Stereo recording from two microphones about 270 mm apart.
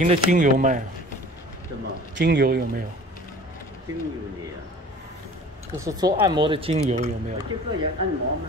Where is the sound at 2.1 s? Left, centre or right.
Right.